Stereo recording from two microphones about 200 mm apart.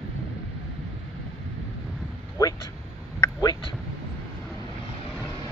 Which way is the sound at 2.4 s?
20° left (ahead or behind).